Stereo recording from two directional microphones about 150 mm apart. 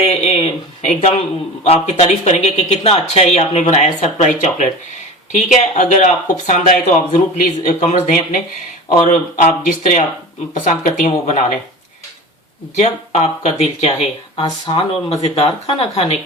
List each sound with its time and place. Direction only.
0.1 s speech: 45° left (ahead or behind)
12.7 s speech: 45° left (ahead or behind)
14.4 s speech: 30° left (ahead or behind)
15.6 s speech: 40° left (ahead or behind)